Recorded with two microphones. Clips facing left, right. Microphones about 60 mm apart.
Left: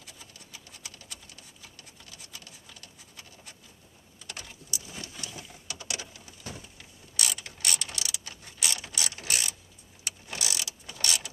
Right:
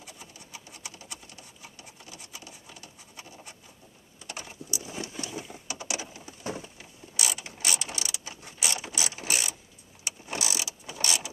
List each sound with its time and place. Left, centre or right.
0.0 s a sound: centre
8.9 s ratchet: centre
10.4 s mechanisms: centre